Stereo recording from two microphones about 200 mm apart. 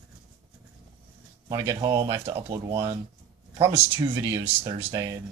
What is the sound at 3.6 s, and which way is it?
Speech, 15° right (ahead or behind).